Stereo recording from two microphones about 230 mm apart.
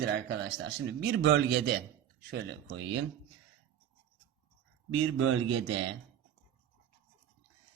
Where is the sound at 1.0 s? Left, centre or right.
Right.